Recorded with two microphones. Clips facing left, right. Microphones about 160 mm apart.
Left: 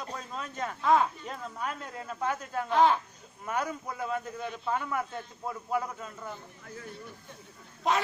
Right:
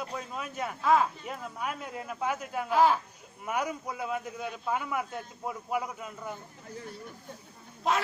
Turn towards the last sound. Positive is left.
turn(degrees=0)  # may be behind; listen again after turning